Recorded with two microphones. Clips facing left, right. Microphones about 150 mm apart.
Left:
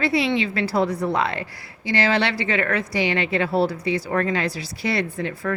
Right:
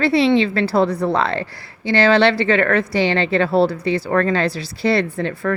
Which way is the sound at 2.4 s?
65° right (ahead or behind).